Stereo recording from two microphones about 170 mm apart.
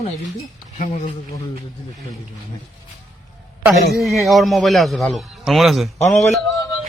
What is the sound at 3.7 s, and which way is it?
A man's voice, centre (ahead or behind).